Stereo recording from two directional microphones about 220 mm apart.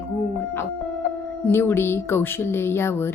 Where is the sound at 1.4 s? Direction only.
10° left (ahead or behind).